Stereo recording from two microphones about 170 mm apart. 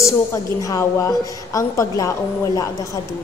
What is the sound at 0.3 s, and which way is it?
A woman's voice, 15° left (ahead or behind).